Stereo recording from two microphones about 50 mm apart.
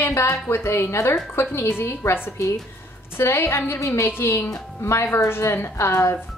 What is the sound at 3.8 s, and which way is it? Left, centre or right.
Speech, left.